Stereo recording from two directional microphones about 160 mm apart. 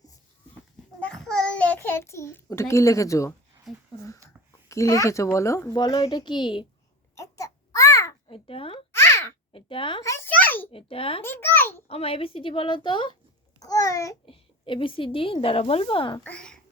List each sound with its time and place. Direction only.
1.1 s a child's voice: 5° left (ahead or behind); by 3.3 s 20° left (ahead or behind)
4.7 s a child's voice: 20° left (ahead or behind)
7.2 s babbling: 20° left (ahead or behind)
8.3 s a sound: 35° left (ahead or behind)
8.9 s a sound: 15° left (ahead or behind)
9.5 s a sound: 35° left (ahead or behind)
10.0 s a sound: 15° left (ahead or behind)
10.7 s a woman's voice: 35° left (ahead or behind)
11.2 s a child's voice: 15° left (ahead or behind)
11.9 s a woman's voice: 35° left (ahead or behind); by 14.2 s 20° left (ahead or behind)
14.3 s a woman's voice: 30° left (ahead or behind)
16.2 s a child's voice: 5° left (ahead or behind)